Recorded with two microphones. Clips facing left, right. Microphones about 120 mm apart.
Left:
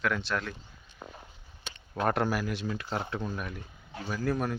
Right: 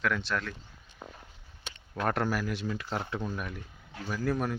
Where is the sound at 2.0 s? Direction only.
10° left (ahead or behind).